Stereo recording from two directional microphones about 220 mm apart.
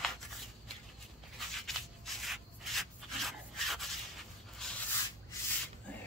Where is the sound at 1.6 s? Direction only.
Centre (ahead or behind).